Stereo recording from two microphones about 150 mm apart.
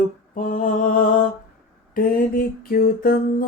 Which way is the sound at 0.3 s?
65° left (ahead or behind).